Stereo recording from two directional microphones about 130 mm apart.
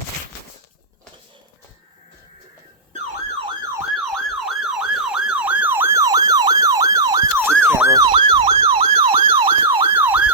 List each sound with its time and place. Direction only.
3.6 s emergency vehicle: 20° right (ahead or behind)
3.9 s emergency vehicle: centre (ahead or behind); by 7.9 s 20° right (ahead or behind)
7.9 s emergency vehicle: 30° right (ahead or behind)
8.4 s emergency vehicle: 50° right (ahead or behind)
9.9 s emergency vehicle: 15° right (ahead or behind)